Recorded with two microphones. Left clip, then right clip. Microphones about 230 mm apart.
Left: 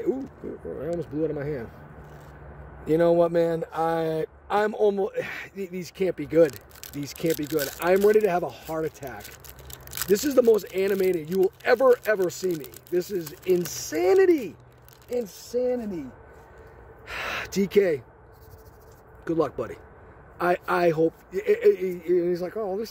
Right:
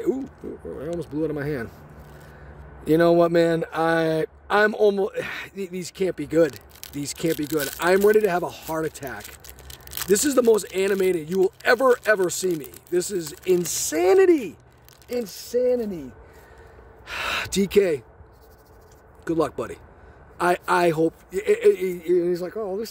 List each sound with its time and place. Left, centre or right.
0.7 s speech: centre
2.8 s a man's voice: right; by 11.5 s centre
11.6 s a man's voice: centre
17.0 s speech: centre
19.2 s a man's voice: centre